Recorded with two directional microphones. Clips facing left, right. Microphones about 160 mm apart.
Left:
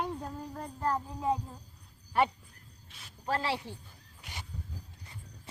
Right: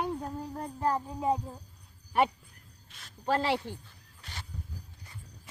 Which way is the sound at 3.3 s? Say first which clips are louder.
Right 4 dB; 25° right (ahead or behind).